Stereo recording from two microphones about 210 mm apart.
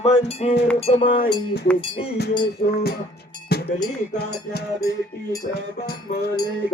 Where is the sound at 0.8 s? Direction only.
30° left (ahead or behind).